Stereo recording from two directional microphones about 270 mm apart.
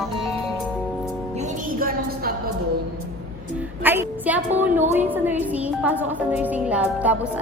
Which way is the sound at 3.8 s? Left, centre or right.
Centre.